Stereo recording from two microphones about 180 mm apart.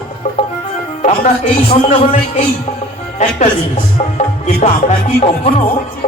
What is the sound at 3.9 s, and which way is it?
Music, 35° left (ahead or behind).